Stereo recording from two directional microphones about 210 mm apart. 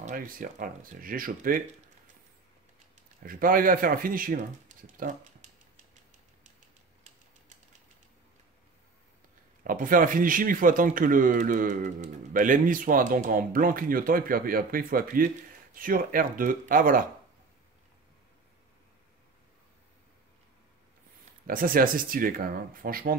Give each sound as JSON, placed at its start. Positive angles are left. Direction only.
{"t": 0.0, "sound": "speech", "side_deg": -40}
{"t": 3.2, "sound": "speech", "side_deg": -40}
{"t": 9.6, "sound": "speech", "side_deg": -40}
{"t": 21.5, "sound": "speech", "side_deg": -40}